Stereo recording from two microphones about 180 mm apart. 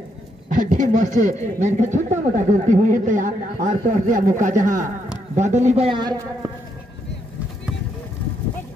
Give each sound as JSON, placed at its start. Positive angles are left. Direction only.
{"t": 0.5, "sound": "a man's voice", "side_deg": -45}